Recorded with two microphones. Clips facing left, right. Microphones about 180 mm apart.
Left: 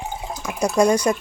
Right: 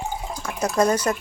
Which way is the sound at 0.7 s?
10° left (ahead or behind).